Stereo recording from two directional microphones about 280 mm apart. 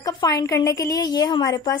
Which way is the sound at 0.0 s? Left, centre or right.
Centre.